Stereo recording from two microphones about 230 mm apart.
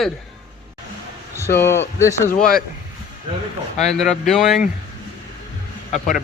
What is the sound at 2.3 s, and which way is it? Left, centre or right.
Speech, left.